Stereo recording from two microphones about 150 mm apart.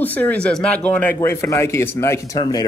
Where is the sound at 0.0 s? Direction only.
10° left (ahead or behind).